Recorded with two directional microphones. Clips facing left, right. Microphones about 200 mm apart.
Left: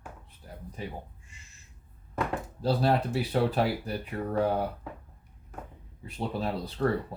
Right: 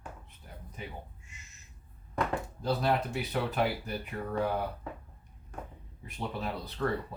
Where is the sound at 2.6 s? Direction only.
30° left (ahead or behind).